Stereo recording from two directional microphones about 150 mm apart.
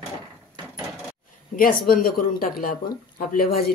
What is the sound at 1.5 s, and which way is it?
Speech, 70° left (ahead or behind).